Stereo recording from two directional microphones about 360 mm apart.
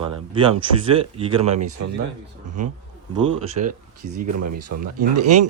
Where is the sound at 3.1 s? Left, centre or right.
Centre.